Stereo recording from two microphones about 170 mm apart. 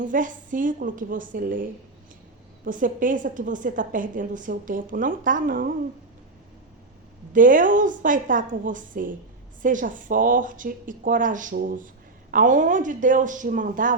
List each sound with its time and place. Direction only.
0.0 s a woman's voice: 50° right (ahead or behind)
2.6 s a woman's voice: 50° right (ahead or behind)
7.3 s a woman's voice: 50° right (ahead or behind)